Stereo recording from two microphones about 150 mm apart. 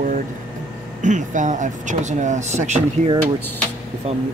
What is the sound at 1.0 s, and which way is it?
Speech, 55° right (ahead or behind).